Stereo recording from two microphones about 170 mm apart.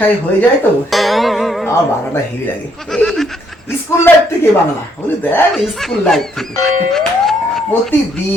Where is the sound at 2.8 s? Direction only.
5° left (ahead or behind).